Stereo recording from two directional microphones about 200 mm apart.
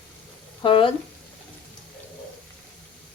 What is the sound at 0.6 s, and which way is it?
Frying, 25° left (ahead or behind).